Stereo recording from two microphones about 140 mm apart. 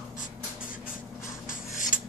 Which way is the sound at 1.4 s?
70° left (ahead or behind).